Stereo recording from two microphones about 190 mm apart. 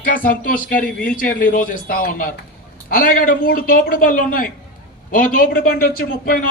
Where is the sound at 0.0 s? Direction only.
50° left (ahead or behind).